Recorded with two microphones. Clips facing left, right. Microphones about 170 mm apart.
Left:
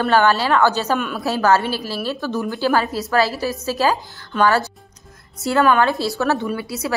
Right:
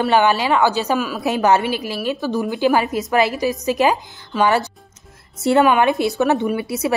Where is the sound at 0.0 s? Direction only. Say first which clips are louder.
Even; 15° right (ahead or behind).